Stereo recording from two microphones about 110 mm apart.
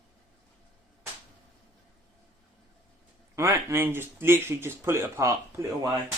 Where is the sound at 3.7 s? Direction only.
20° right (ahead or behind).